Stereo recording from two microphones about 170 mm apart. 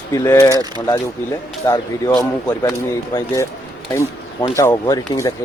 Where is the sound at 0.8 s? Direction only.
20° left (ahead or behind).